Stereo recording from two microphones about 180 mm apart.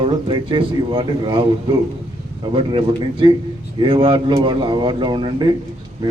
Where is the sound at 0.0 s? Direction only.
25° right (ahead or behind).